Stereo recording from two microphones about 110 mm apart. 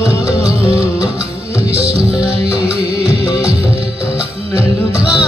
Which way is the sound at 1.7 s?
60° right (ahead or behind).